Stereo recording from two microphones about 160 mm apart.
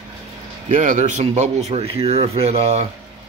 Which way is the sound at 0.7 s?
50° right (ahead or behind).